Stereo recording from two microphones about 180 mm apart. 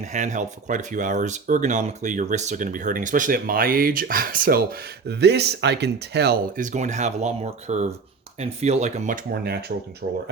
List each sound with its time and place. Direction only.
0.0 s speech: 40° right (ahead or behind)